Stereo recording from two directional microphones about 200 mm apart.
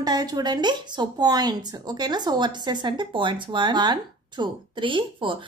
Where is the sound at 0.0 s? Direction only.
20° right (ahead or behind).